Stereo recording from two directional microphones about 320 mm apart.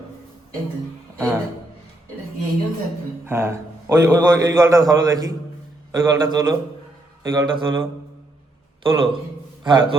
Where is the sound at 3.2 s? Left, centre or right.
Centre.